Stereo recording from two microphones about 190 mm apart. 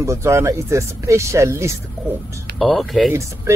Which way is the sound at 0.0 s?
15° right (ahead or behind).